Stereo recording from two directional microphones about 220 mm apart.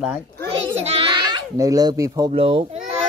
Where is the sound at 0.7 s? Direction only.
25° right (ahead or behind).